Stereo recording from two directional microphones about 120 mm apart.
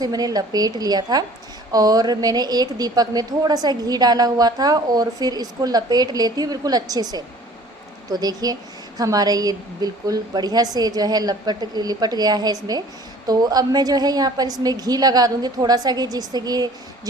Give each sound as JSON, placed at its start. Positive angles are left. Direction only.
{"t": 0.0, "sound": "a woman's voice", "side_deg": -30}